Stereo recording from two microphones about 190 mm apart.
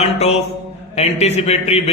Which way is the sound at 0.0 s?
35° left (ahead or behind).